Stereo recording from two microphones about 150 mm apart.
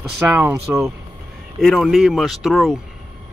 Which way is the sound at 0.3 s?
15° right (ahead or behind).